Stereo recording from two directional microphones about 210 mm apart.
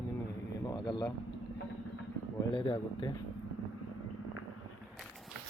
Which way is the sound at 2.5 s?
25° left (ahead or behind).